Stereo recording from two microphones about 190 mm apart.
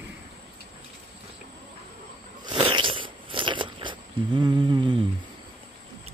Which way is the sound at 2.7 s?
25° right (ahead or behind).